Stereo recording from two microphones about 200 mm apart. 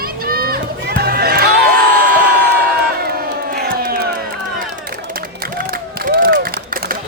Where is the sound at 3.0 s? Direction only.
50° right (ahead or behind).